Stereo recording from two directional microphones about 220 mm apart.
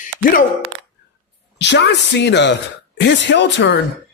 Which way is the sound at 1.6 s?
50° left (ahead or behind).